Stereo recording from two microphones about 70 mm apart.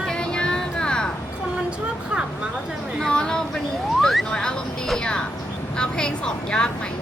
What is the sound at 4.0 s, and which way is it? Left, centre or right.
Music, centre.